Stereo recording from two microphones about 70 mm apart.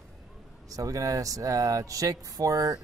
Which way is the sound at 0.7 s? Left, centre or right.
Right.